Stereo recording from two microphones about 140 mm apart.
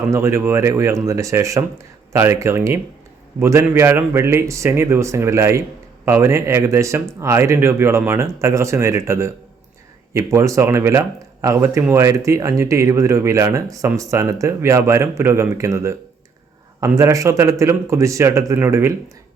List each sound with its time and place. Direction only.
0.1 s speech: 20° right (ahead or behind)